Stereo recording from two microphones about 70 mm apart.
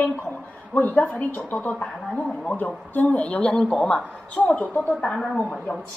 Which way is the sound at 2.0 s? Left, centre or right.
Centre.